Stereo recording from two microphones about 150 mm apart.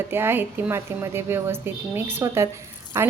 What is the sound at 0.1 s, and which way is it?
A woman's voice, 15° right (ahead or behind).